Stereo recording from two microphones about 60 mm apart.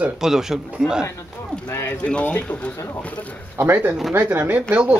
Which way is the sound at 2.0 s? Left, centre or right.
Centre.